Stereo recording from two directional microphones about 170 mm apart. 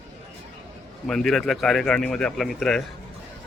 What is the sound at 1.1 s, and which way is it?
Speech, centre (ahead or behind).